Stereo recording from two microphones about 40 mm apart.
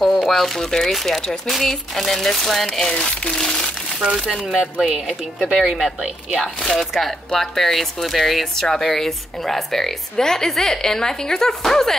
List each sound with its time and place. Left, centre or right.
0.0 s a woman's voice: centre
4.6 s speech: right
5.0 s speech: centre
6.4 s a woman's voice: centre